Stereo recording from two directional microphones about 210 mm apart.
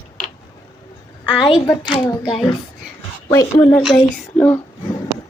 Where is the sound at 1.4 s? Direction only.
20° left (ahead or behind).